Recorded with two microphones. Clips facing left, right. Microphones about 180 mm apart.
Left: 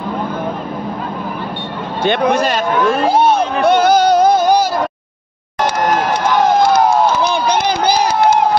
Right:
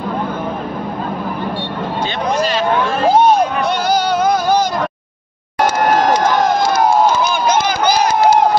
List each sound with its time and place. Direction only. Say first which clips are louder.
2.0 s speech: left 6 dB; 60° left (ahead or behind)
3.6 s a sound: left 6 dB; 55° left (ahead or behind); by 4.4 s 40° left (ahead or behind)
7.2 s run: even; 35° left (ahead or behind)